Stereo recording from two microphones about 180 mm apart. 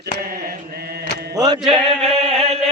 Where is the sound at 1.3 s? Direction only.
20° right (ahead or behind).